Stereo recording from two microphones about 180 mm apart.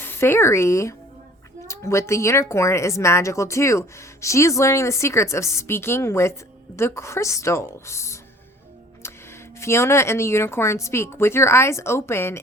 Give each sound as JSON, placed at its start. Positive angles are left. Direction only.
{"t": 0.0, "sound": "a woman's voice", "side_deg": 10}
{"t": 9.6, "sound": "a woman's voice", "side_deg": 15}